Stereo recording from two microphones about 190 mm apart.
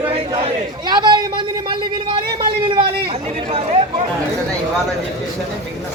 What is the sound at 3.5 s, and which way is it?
Chatter, 35° right (ahead or behind).